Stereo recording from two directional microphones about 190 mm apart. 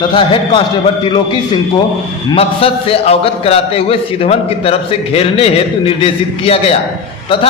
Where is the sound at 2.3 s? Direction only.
30° left (ahead or behind).